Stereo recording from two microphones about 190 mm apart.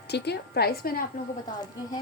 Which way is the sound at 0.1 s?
60° left (ahead or behind).